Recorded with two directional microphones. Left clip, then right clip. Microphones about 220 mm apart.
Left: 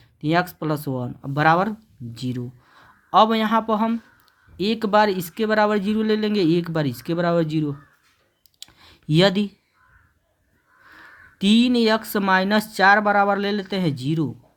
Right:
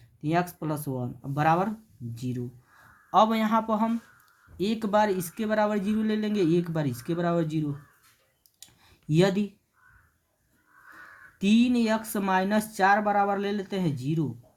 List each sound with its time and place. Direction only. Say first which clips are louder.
0.2 s speech: left 6 dB; 35° left (ahead or behind)
8.5 s clicking: left 10 dB; 35° left (ahead or behind)
11.3 s speech: left 6 dB; 35° left (ahead or behind)